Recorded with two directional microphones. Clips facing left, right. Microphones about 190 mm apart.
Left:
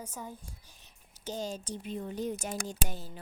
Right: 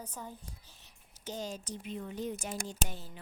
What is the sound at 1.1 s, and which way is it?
Speech, 30° left (ahead or behind).